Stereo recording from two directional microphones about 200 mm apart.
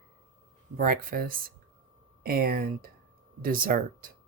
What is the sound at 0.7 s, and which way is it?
Speech, 45° right (ahead or behind).